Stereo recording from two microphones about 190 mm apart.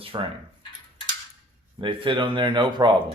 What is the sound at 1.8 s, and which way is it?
Speech, 25° right (ahead or behind).